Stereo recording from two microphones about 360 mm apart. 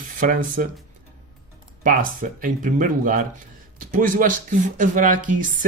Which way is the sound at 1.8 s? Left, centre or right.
Right.